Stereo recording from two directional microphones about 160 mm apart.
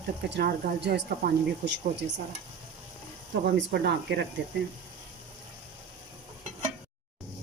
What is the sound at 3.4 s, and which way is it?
Speech, 90° right.